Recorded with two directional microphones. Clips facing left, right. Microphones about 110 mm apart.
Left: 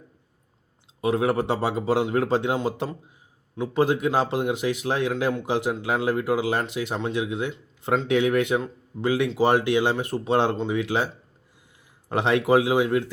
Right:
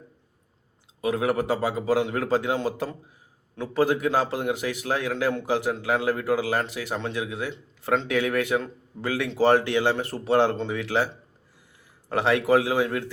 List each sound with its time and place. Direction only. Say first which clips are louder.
1.0 s speech: left 2 dB; 25° left (ahead or behind)